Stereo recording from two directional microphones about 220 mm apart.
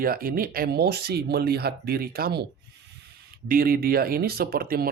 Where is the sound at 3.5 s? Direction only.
40° right (ahead or behind).